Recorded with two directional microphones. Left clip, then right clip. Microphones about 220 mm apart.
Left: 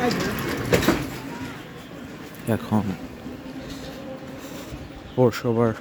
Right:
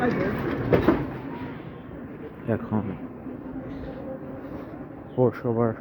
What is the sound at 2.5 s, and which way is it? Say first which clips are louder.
Speech: left 3 dB; 40° left (ahead or behind).